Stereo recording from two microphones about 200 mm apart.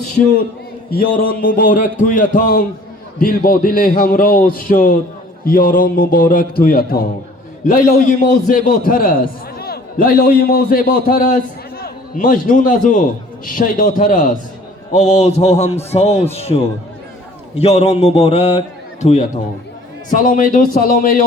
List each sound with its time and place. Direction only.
0.9 s a man's voice: 45° left (ahead or behind)
14.9 s mantra: 35° left (ahead or behind)
17.6 s mantra: 30° left (ahead or behind)
20.1 s a man's voice: 40° left (ahead or behind)